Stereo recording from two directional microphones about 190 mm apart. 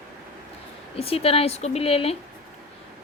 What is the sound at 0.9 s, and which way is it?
A woman's voice, 30° left (ahead or behind).